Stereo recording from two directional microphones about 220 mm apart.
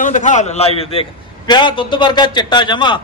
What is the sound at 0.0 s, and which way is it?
A man's voice, 35° left (ahead or behind).